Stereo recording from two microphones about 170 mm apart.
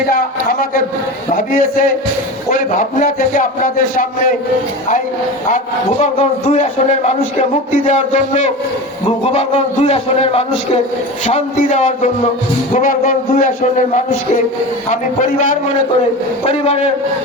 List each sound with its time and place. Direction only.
0.1 s a man's voice: 60° left (ahead or behind)
6.0 s a man's voice: 40° left (ahead or behind)
13.6 s a man's voice: 45° left (ahead or behind)